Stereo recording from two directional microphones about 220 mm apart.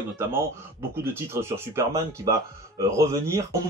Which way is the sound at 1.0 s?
10° right (ahead or behind).